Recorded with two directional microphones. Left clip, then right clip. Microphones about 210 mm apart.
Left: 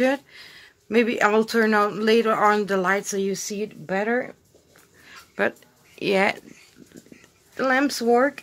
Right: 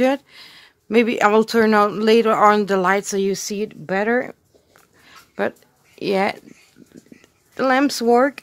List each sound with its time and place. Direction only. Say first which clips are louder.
0.0 s speech: right 3 dB; 40° right (ahead or behind); by 4.4 s 55° right (ahead or behind)
5.9 s speech: right 1 dB; 30° right (ahead or behind)
7.2 s speech: right 4 dB; 45° right (ahead or behind)